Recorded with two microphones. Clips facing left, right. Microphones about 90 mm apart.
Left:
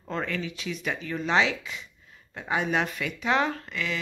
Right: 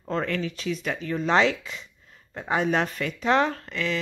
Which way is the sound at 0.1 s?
40° right (ahead or behind).